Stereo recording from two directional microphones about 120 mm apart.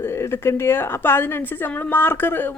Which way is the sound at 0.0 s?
20° left (ahead or behind).